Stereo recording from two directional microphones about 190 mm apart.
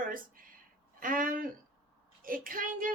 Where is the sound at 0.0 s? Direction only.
45° right (ahead or behind).